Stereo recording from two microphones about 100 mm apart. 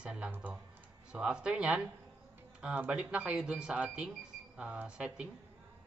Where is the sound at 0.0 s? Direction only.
10° right (ahead or behind).